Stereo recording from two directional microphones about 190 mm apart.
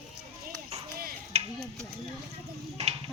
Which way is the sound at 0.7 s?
35° right (ahead or behind).